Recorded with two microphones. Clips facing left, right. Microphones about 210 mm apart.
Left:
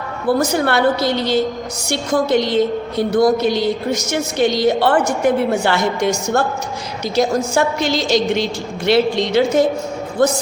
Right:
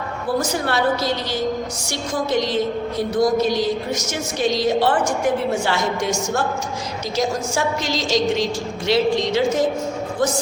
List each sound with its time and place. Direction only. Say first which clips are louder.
0.3 s a woman's voice: left 3 dB; 65° left (ahead or behind)